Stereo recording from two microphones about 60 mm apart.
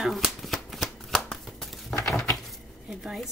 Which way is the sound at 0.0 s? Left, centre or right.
Centre.